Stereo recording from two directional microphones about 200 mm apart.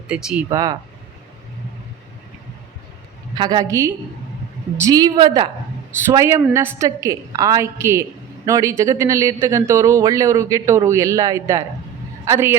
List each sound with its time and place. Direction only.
0.1 s speech: 5° right (ahead or behind)
0.5 s speech: 20° right (ahead or behind)
3.3 s a woman's voice: 20° right (ahead or behind)